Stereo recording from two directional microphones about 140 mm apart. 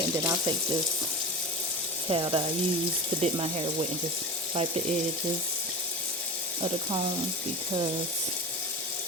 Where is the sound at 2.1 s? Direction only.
35° right (ahead or behind).